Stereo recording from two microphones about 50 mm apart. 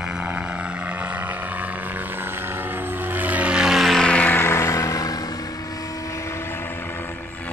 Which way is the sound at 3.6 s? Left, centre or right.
Centre.